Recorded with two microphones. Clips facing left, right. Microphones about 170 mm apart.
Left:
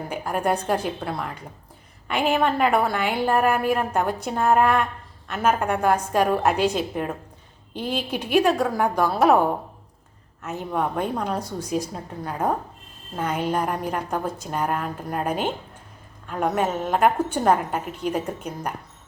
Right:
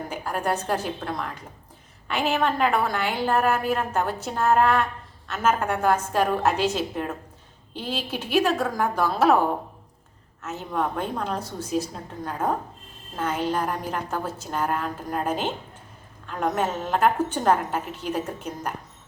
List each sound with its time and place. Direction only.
0.3 s a woman's voice: 10° left (ahead or behind)
7.7 s a woman's voice: 55° left (ahead or behind)
8.2 s a woman's voice: 15° left (ahead or behind)
10.7 s a woman's voice: 10° left (ahead or behind)